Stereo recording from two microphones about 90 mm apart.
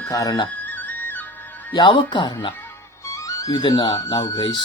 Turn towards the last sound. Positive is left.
turn(degrees=50)  # may be behind; listen again after turning